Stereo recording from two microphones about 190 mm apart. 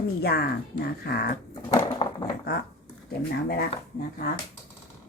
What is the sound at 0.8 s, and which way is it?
Speech, 55° left (ahead or behind).